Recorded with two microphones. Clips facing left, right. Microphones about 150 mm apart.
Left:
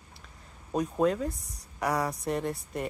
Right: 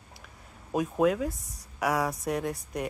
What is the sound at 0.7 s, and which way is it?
Speech, 5° right (ahead or behind).